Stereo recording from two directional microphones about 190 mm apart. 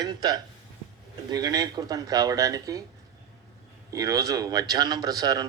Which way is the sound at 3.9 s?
20° right (ahead or behind).